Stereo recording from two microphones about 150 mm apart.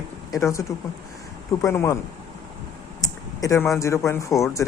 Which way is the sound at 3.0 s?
20° left (ahead or behind).